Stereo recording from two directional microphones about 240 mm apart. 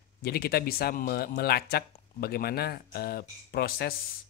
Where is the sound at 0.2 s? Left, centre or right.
Left.